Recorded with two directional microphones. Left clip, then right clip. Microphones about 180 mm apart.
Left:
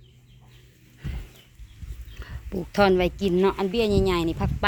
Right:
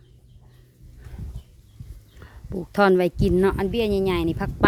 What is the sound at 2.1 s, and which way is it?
Speech, centre (ahead or behind).